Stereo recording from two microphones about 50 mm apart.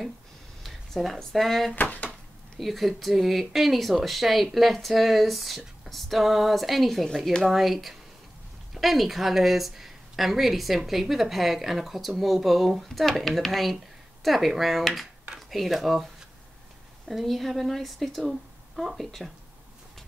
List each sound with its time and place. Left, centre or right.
0.7 s speech: centre
1.8 s speech: left
2.6 s speech: centre
17.1 s speech: centre